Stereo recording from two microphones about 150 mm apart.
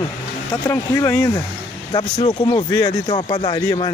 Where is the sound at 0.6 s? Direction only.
15° left (ahead or behind).